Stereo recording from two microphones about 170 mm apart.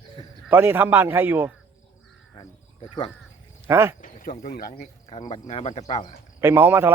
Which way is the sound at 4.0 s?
50° left (ahead or behind).